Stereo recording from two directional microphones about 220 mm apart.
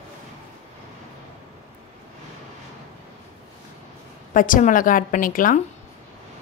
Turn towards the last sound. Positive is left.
turn(degrees=40)  # may be behind; listen again after turning